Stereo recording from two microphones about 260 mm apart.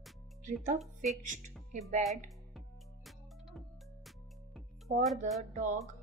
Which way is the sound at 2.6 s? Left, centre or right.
Centre.